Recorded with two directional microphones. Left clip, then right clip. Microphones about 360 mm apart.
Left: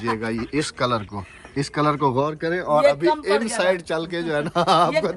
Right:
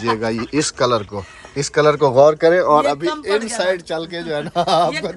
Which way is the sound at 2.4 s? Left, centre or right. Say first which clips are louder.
Right 8 dB; right.